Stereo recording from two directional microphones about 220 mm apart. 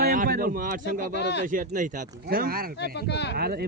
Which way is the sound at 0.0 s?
40° right (ahead or behind).